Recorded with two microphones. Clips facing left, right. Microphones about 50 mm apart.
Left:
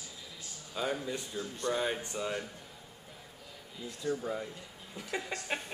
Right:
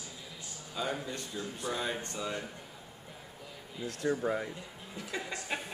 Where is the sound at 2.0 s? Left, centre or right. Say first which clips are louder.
Left 1 dB; centre.